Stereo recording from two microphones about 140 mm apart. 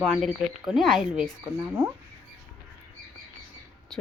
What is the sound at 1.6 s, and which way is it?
Speech, 15° right (ahead or behind).